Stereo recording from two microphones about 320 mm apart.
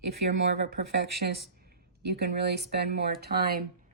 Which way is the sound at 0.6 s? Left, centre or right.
Right.